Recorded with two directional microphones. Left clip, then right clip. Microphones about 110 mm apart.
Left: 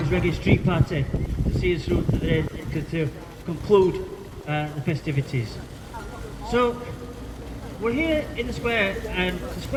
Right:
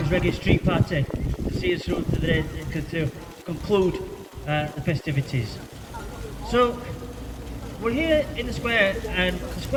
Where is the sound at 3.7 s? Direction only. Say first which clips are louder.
Left 4 dB; 35° right (ahead or behind).